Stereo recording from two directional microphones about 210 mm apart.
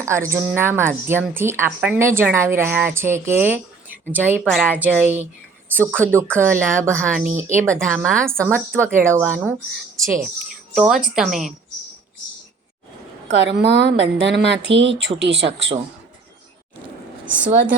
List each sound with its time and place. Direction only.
0.0 s a woman's voice: 15° right (ahead or behind)
10.8 s a woman's voice: centre (ahead or behind)
13.3 s speech: 55° right (ahead or behind)